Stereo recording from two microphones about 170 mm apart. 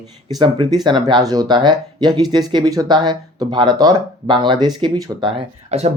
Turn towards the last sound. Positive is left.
turn(degrees=-40)  # may be behind; listen again after turning